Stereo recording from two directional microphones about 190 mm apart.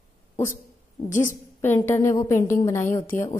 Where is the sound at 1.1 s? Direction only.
40° left (ahead or behind).